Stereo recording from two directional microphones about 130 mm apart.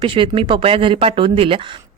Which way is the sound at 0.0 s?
40° right (ahead or behind).